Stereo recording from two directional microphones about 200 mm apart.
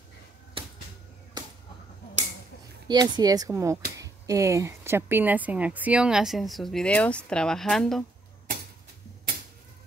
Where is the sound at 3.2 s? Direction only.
20° right (ahead or behind); by 8.0 s centre (ahead or behind).